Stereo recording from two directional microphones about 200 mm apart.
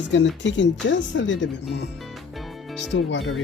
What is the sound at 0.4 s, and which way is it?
Speech, 65° left (ahead or behind).